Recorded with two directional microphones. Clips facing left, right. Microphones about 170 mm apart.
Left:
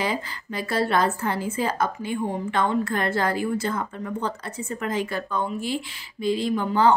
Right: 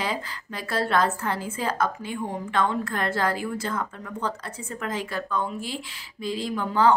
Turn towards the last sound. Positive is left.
turn(degrees=0)  # may be behind; listen again after turning